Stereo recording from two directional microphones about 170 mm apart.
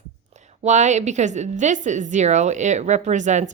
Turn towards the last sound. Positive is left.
turn(degrees=-45)  # may be behind; listen again after turning